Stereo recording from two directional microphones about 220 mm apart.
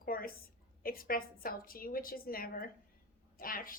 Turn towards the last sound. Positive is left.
turn(degrees=40)  # may be behind; listen again after turning